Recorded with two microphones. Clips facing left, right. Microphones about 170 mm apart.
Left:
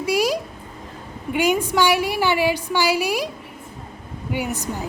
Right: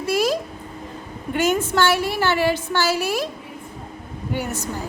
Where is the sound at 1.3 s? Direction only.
10° left (ahead or behind).